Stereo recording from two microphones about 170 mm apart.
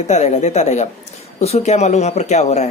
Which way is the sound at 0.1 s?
40° left (ahead or behind).